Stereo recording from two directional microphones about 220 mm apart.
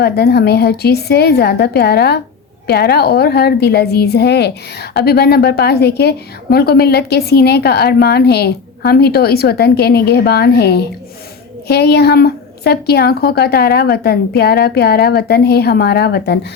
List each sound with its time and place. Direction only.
0.0 s a woman's voice: 45° left (ahead or behind)